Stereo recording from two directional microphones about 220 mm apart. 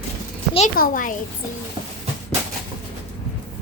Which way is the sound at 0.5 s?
35° left (ahead or behind).